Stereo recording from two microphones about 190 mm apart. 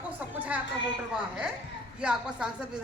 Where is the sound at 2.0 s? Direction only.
5° right (ahead or behind).